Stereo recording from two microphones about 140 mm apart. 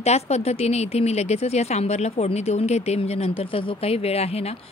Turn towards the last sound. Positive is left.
turn(degrees=45)  # may be behind; listen again after turning